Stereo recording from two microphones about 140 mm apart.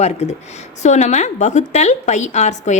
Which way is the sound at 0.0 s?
50° left (ahead or behind).